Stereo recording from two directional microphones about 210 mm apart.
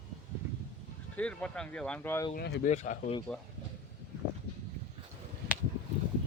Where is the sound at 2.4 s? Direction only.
50° left (ahead or behind).